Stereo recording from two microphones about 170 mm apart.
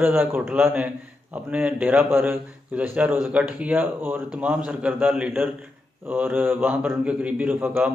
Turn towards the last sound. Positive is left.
turn(degrees=-10)  # may be behind; listen again after turning